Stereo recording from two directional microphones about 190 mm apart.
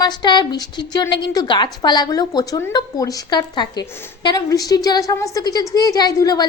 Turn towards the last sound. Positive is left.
turn(degrees=20)  # may be behind; listen again after turning